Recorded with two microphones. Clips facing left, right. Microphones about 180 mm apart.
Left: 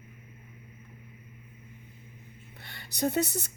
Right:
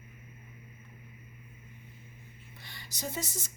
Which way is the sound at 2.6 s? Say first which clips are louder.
Left 11 dB; 60° left (ahead or behind).